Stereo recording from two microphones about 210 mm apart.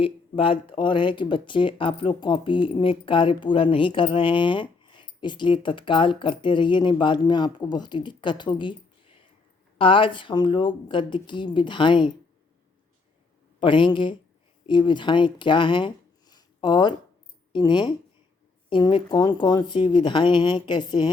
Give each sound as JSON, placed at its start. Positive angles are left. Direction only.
{"t": 0.0, "sound": "speech", "side_deg": 25}
{"t": 13.6, "sound": "speech", "side_deg": 25}